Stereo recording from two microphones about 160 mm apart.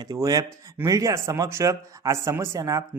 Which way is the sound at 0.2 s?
20° right (ahead or behind).